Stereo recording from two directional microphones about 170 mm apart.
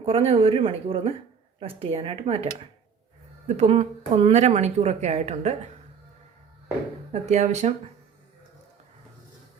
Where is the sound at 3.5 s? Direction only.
40° right (ahead or behind).